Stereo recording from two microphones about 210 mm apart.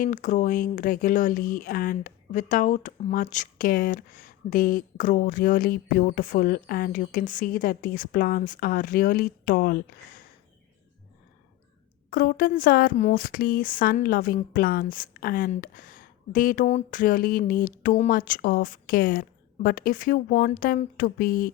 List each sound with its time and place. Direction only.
0.0 s speech: 40° left (ahead or behind)
12.1 s speech: 45° left (ahead or behind)